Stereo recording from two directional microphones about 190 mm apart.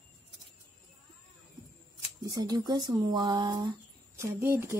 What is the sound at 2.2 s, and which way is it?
Speech, 20° right (ahead or behind).